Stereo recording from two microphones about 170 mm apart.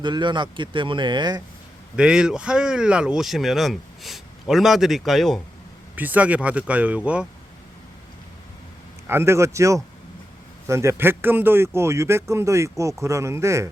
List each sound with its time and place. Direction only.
0.0 s speech: 25° right (ahead or behind)
2.0 s speech: 5° right (ahead or behind)
6.0 s speech: 10° right (ahead or behind)
9.0 s speech: 15° right (ahead or behind)